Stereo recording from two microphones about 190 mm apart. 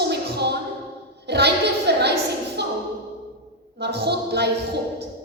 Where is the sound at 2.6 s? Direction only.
60° right (ahead or behind).